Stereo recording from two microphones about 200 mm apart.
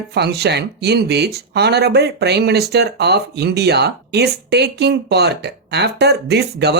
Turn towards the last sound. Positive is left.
turn(degrees=-55)  # may be behind; listen again after turning